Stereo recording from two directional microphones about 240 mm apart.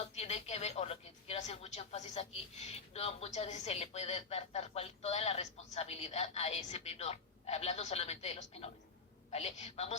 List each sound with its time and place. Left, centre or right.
0.0 s speech: left